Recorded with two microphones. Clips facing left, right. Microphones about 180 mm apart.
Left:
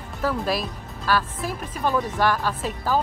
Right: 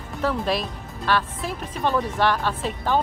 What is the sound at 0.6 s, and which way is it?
Speech, 40° left (ahead or behind).